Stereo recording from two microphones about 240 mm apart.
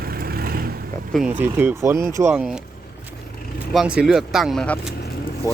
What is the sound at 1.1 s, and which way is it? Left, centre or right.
Speech, centre.